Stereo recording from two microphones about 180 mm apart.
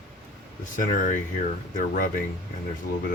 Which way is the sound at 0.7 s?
50° left (ahead or behind).